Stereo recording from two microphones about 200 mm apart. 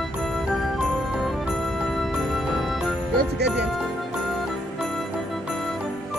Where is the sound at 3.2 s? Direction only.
55° right (ahead or behind).